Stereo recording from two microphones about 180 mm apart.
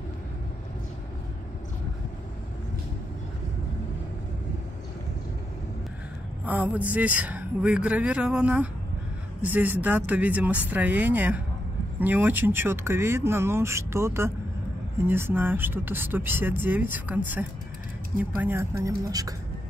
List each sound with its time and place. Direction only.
6.4 s speech: 10° right (ahead or behind)